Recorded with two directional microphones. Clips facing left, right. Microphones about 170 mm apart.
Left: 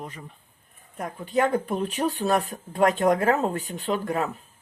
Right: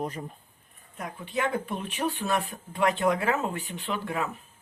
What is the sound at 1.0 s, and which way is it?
Speech, 45° left (ahead or behind).